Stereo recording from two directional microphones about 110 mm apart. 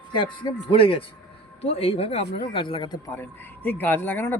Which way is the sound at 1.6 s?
65° left (ahead or behind).